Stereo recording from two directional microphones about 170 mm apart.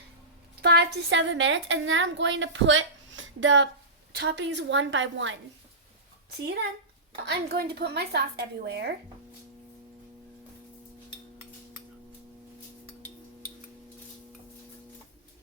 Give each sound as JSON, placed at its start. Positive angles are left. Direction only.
{"t": 0.6, "sound": "a woman's voice", "side_deg": -75}
{"t": 7.3, "sound": "a woman's voice", "side_deg": -70}